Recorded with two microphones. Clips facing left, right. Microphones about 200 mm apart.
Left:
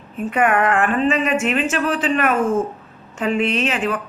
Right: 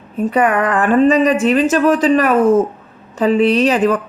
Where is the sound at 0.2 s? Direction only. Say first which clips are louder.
Right 3 dB; 35° right (ahead or behind).